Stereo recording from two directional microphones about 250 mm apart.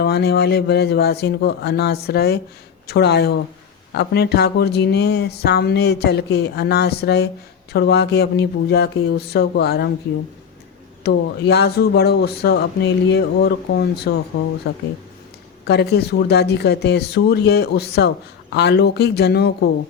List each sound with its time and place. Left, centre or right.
0.0 s speech: left
11.0 s speech: left
14.3 s speech: left
15.6 s speech: left